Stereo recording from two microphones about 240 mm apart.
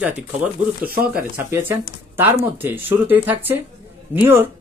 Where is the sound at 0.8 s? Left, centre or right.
Right.